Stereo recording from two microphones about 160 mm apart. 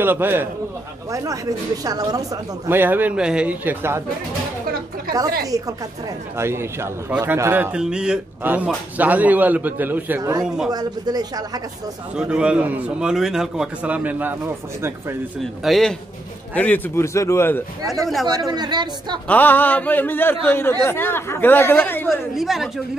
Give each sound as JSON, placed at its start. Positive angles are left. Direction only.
{"t": 0.0, "sound": "a man's voice", "side_deg": -15}
{"t": 2.7, "sound": "a man's voice", "side_deg": -10}
{"t": 5.4, "sound": "a man's voice", "side_deg": -20}
{"t": 10.7, "sound": "speech", "side_deg": -25}
{"t": 12.2, "sound": "a man's voice", "side_deg": -5}
{"t": 15.6, "sound": "a man's voice", "side_deg": 0}
{"t": 18.2, "sound": "speech", "side_deg": -25}
{"t": 19.2, "sound": "speech", "side_deg": 10}
{"t": 22.3, "sound": "a man's voice", "side_deg": 0}